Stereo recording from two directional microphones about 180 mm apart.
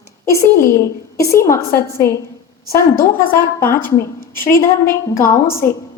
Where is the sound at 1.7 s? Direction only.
15° left (ahead or behind).